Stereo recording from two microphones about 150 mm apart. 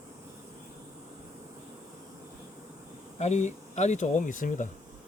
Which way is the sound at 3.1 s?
50° left (ahead or behind).